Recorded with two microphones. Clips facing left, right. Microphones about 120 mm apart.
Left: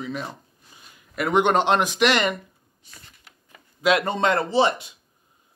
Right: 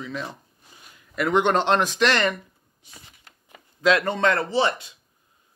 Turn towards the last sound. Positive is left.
turn(degrees=20)  # may be behind; listen again after turning